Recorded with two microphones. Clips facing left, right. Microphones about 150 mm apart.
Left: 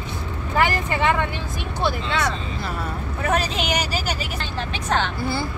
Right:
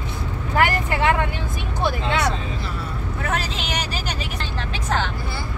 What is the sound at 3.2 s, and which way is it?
Speech, 15° left (ahead or behind).